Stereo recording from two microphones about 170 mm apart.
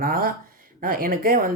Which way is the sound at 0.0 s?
60° right (ahead or behind).